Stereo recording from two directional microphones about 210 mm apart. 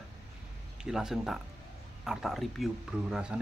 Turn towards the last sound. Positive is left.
turn(degrees=-5)  # may be behind; listen again after turning